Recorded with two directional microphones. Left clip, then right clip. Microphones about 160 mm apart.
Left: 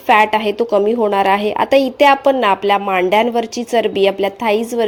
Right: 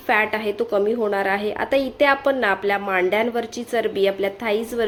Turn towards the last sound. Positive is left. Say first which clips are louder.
# left 7 dB
turn(degrees=35)  # may be behind; listen again after turning